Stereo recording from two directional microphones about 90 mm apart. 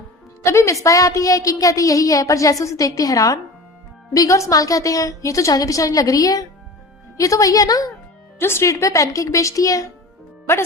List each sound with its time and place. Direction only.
0.4 s a woman's voice: 35° left (ahead or behind)
8.4 s a woman's voice: 30° left (ahead or behind)